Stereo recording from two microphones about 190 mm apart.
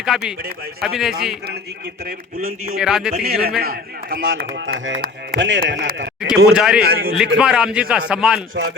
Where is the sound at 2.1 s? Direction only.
50° right (ahead or behind).